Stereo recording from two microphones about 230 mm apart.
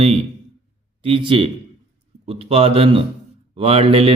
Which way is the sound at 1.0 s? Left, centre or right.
Right.